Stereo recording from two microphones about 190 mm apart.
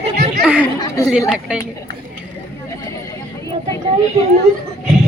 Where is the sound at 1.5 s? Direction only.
5° right (ahead or behind).